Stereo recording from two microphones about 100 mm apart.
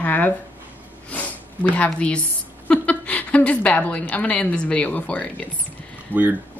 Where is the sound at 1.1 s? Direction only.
15° left (ahead or behind).